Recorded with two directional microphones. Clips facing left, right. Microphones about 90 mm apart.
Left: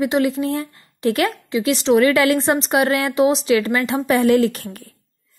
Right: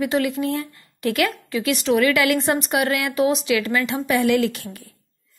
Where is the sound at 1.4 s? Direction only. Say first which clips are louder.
Left 4 dB; 25° left (ahead or behind); by 4.9 s 45° left (ahead or behind).